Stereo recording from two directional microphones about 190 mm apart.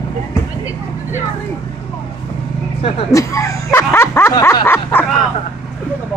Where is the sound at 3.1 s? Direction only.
15° left (ahead or behind).